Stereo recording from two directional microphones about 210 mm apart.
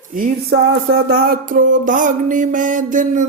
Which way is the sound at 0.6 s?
75° right (ahead or behind).